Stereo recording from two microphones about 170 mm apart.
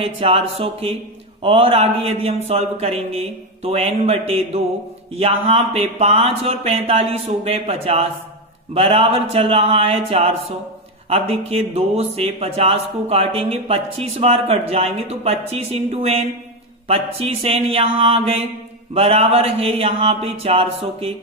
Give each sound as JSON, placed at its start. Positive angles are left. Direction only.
{"t": 0.0, "sound": "a man's voice", "side_deg": -35}